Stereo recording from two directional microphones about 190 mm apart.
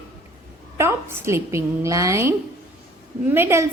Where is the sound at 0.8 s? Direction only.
15° right (ahead or behind).